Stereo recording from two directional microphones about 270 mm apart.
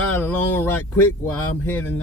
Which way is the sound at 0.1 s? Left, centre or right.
Centre.